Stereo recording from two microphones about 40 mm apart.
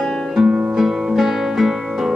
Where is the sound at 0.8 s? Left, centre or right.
Centre.